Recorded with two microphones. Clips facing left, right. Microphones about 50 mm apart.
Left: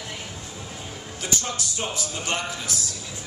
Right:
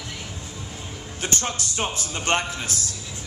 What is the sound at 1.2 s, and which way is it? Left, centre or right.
A man's voice, right.